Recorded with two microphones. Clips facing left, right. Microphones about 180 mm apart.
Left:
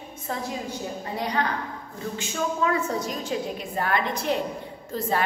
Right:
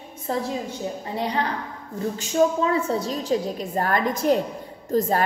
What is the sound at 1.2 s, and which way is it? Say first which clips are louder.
A woman's voice: right 1 dB; 30° right (ahead or behind).